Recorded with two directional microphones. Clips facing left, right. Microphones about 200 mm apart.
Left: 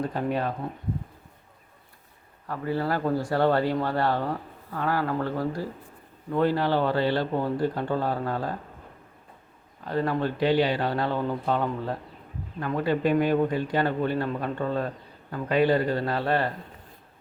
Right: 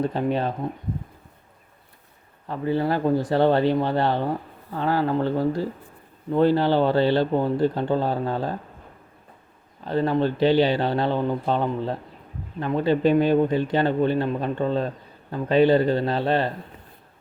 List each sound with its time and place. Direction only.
0.0 s speech: 25° right (ahead or behind)
2.5 s speech: 20° right (ahead or behind)
9.8 s speech: 25° right (ahead or behind)